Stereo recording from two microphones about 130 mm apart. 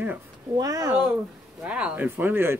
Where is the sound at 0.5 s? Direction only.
30° right (ahead or behind).